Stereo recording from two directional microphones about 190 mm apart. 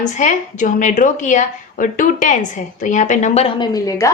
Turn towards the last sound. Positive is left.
turn(degrees=15)  # may be behind; listen again after turning